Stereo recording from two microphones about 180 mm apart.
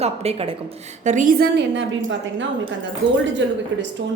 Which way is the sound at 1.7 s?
90° right.